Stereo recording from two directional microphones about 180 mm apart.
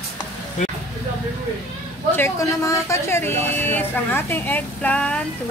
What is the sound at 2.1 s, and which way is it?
Speech, 15° left (ahead or behind).